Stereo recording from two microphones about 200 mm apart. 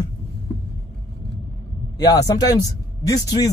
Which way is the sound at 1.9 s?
20° left (ahead or behind).